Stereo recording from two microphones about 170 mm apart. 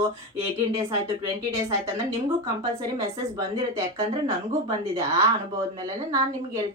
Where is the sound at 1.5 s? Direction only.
15° right (ahead or behind).